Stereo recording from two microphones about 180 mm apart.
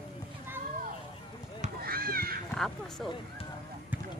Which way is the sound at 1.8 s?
55° right (ahead or behind).